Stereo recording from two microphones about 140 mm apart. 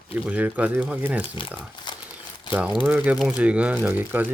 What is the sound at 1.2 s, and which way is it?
Speech, 40° left (ahead or behind).